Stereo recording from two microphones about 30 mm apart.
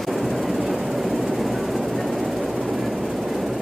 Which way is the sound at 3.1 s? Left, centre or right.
Centre.